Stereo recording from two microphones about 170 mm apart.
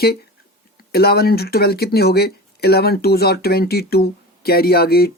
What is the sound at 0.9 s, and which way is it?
Speech, 65° left (ahead or behind).